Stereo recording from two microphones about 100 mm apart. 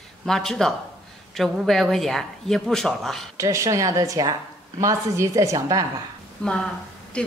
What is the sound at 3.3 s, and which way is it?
A woman's voice, 35° right (ahead or behind).